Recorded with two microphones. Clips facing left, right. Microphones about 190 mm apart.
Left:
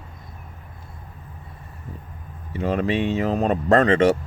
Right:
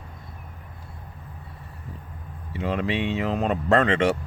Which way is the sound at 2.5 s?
45° left (ahead or behind).